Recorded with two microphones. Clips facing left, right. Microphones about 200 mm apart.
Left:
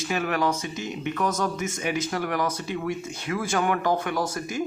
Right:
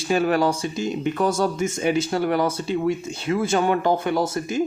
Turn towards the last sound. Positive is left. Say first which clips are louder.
# right 5 dB
turn(degrees=-25)  # may be behind; listen again after turning